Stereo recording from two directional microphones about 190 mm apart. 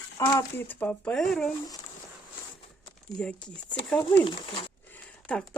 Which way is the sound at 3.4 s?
5° left (ahead or behind).